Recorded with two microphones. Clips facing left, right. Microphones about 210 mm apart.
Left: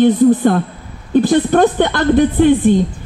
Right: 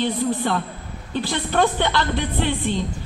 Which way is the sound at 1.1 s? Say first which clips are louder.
Left 12 dB; 50° left (ahead or behind).